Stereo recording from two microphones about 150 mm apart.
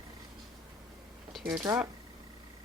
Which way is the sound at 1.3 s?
Centre (ahead or behind).